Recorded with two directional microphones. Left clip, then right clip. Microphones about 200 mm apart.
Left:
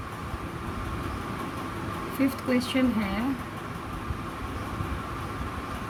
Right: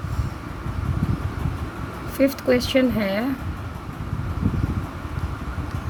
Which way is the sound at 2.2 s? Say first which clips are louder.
Right 8 dB; 40° right (ahead or behind).